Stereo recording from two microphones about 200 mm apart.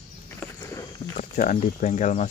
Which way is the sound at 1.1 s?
40° left (ahead or behind).